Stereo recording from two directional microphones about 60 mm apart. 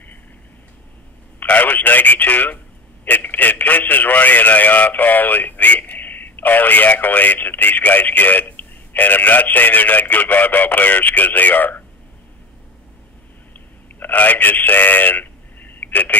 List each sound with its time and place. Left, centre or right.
1.4 s telephone: left
3.1 s speech: left
13.5 s telephone: left